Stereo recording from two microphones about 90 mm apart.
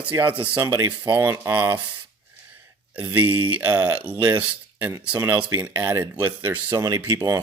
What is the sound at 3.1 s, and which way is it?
Speech, 25° right (ahead or behind).